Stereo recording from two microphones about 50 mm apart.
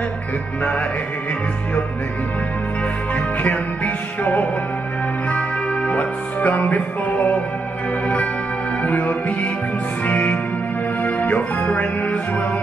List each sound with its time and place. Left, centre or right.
3.2 s music: left
8.8 s music: left